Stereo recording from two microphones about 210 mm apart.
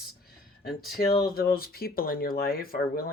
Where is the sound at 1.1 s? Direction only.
45° left (ahead or behind).